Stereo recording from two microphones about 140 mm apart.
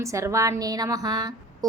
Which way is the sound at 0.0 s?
20° right (ahead or behind).